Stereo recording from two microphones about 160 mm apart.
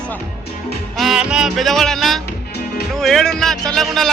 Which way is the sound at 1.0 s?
5° right (ahead or behind).